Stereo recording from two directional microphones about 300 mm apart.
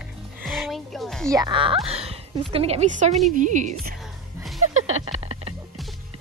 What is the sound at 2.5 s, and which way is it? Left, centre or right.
A woman's voice, centre.